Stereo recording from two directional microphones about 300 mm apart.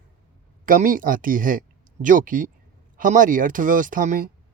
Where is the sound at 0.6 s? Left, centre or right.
Right.